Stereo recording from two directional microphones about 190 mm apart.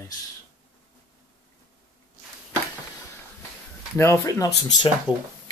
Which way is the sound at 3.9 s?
15° left (ahead or behind).